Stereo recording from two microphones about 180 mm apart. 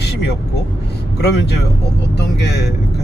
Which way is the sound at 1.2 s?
65° left (ahead or behind).